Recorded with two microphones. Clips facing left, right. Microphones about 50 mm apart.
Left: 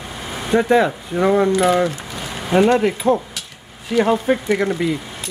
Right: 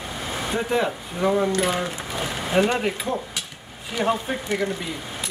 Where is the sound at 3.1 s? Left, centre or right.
Left.